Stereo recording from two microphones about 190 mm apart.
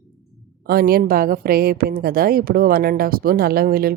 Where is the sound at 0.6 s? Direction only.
50° right (ahead or behind).